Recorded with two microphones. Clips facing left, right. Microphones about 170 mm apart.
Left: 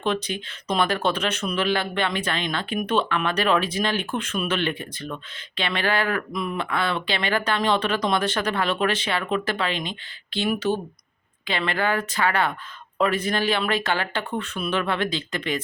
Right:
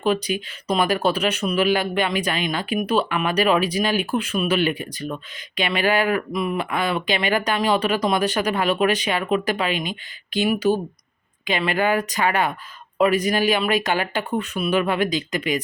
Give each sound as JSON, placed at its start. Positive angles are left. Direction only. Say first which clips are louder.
{"t": 0.0, "sound": "speech", "louder": "right 4 dB", "side_deg": -10}